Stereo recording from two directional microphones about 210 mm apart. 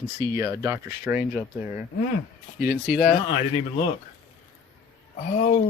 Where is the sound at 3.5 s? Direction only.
25° left (ahead or behind).